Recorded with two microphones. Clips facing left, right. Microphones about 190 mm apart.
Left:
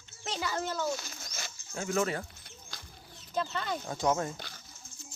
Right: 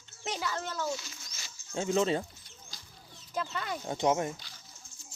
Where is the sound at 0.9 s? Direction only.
50° left (ahead or behind).